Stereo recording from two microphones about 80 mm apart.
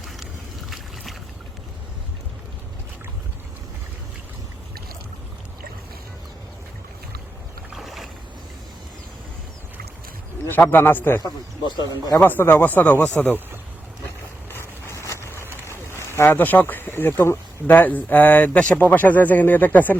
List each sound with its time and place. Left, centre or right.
7.8 s boat: centre
10.5 s speech: left
11.2 s speech: left
12.2 s speech: left
14.5 s vehicle: left
15.4 s vehicle: right
15.9 s speech: left